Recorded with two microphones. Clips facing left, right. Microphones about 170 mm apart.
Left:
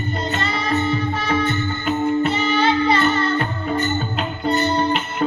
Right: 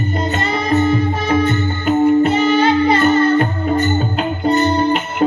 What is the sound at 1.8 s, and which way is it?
Music, 45° right (ahead or behind).